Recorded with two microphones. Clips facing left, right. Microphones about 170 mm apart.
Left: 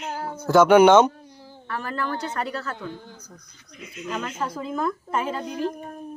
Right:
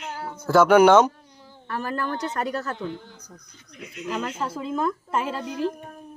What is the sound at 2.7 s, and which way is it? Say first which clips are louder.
Speech: right 2 dB; 20° right (ahead or behind).